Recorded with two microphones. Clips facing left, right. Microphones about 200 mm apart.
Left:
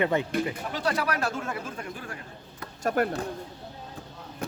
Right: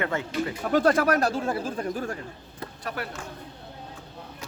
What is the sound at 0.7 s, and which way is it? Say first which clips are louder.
Speech: right 8 dB; 50° right (ahead or behind).